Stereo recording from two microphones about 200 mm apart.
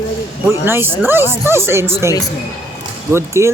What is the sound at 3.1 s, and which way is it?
Speech, 15° right (ahead or behind).